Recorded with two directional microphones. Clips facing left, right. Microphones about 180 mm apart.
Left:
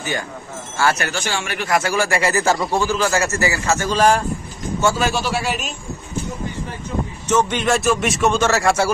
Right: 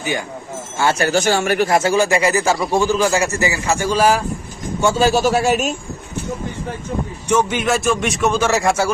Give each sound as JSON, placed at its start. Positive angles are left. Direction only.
{"t": 0.7, "sound": "speech", "side_deg": -25}
{"t": 1.1, "sound": "a man's voice", "side_deg": -40}
{"t": 1.7, "sound": "speech", "side_deg": -25}
{"t": 4.9, "sound": "a man's voice", "side_deg": -35}
{"t": 7.2, "sound": "speech", "side_deg": -10}
{"t": 8.5, "sound": "speech", "side_deg": -15}